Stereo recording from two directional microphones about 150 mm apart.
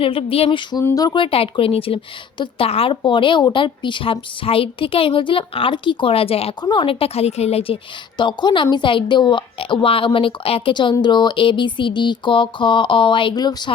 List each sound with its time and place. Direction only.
0.0 s a woman's voice: 35° left (ahead or behind)
0.7 s a woman's voice: 20° left (ahead or behind); by 7.8 s 40° left (ahead or behind)
8.2 s a woman's voice: 30° left (ahead or behind)